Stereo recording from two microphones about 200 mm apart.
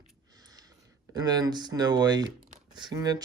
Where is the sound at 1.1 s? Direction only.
20° right (ahead or behind).